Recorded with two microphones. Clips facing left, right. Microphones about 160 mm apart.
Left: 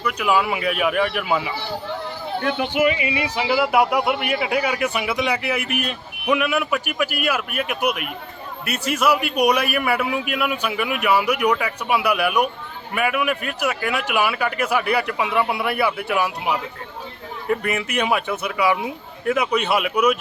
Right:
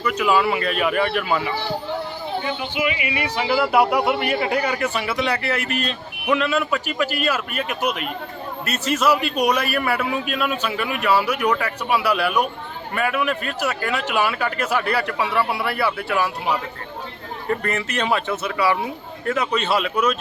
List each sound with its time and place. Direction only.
0.1 s a man's voice: 10° left (ahead or behind)
2.4 s speech: 65° left (ahead or behind)
2.8 s speech: 35° left (ahead or behind)
3.1 s a man's voice: 20° left (ahead or behind)